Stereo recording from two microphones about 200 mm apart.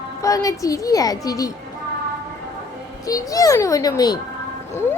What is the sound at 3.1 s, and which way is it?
A woman's voice, 15° left (ahead or behind).